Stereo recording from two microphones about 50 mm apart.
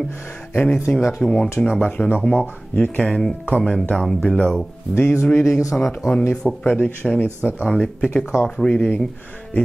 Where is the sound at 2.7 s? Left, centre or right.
Left.